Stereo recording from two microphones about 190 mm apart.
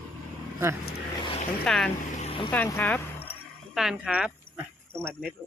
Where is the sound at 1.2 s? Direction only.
30° left (ahead or behind).